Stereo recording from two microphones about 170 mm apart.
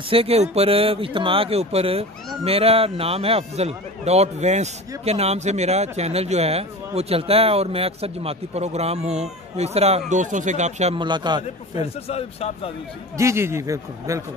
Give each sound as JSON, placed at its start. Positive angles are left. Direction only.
{"t": 0.1, "sound": "speech", "side_deg": -35}
{"t": 11.0, "sound": "a man's voice", "side_deg": -25}
{"t": 11.8, "sound": "speech", "side_deg": 35}
{"t": 13.2, "sound": "a man's voice", "side_deg": -15}